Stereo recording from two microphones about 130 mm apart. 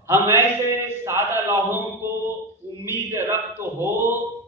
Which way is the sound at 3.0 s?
20° right (ahead or behind).